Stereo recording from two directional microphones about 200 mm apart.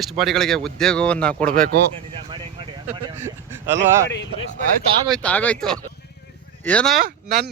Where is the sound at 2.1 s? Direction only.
25° right (ahead or behind).